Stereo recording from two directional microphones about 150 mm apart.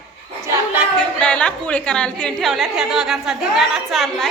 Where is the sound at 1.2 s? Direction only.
5° left (ahead or behind).